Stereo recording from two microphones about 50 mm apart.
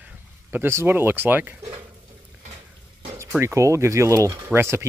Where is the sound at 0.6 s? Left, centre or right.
Right.